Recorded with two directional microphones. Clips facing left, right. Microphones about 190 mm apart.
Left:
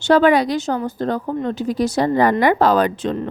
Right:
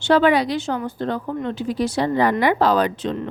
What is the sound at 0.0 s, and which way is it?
A woman's voice, 45° left (ahead or behind).